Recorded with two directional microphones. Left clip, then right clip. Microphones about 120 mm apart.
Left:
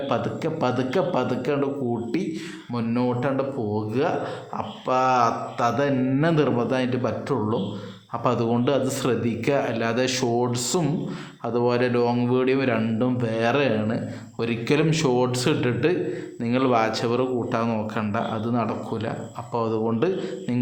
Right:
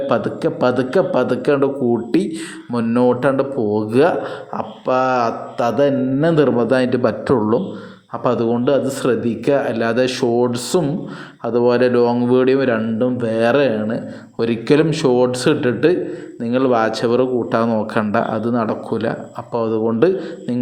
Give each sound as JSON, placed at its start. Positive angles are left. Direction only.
{"t": 0.1, "sound": "speech", "side_deg": -35}
{"t": 1.5, "sound": "speech", "side_deg": -45}
{"t": 4.5, "sound": "speech", "side_deg": -30}
{"t": 8.2, "sound": "speech", "side_deg": -25}
{"t": 19.5, "sound": "speech", "side_deg": -20}
{"t": 20.0, "sound": "speech", "side_deg": -30}